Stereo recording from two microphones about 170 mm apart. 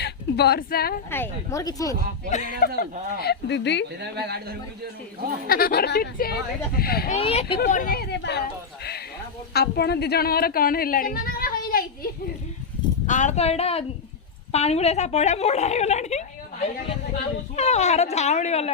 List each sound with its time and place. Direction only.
0.0 s a woman's voice: 70° left (ahead or behind)
1.1 s speech: 15° left (ahead or behind)
2.3 s speech: 45° left (ahead or behind)
3.2 s speech: 80° left
3.9 s speech: 75° right (ahead or behind)
5.5 s speech: 60° left (ahead or behind)
7.1 s speech: 35° left (ahead or behind)
7.7 s speech: 55° left (ahead or behind); by 8.4 s 85° left
8.8 s speech: 70° left (ahead or behind)
13.1 s speech: 45° left (ahead or behind)